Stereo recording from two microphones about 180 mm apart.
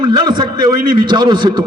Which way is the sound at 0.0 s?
25° right (ahead or behind).